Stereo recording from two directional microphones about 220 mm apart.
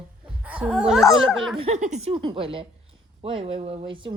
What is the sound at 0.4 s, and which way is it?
Speech, 5° right (ahead or behind).